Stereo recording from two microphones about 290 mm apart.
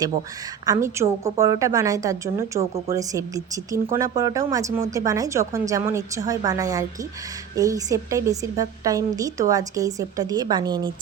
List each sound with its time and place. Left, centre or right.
0.6 s speech: centre
2.6 s speech: right